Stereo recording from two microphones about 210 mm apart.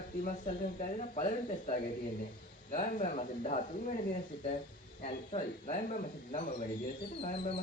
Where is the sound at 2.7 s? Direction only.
35° left (ahead or behind).